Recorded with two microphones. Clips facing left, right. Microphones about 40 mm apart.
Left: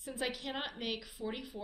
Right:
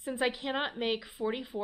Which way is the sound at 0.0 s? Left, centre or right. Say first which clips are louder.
Right 7 dB; right.